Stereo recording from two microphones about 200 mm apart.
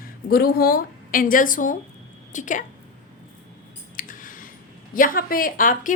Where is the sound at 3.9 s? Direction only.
45° left (ahead or behind).